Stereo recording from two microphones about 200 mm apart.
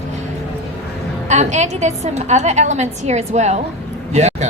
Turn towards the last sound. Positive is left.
turn(degrees=-35)  # may be behind; listen again after turning